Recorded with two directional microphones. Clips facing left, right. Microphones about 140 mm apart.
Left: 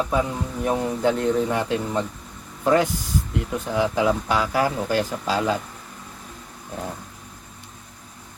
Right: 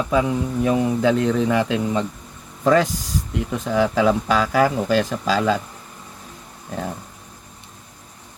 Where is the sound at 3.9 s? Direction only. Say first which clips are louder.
Right 3 dB; 90° right.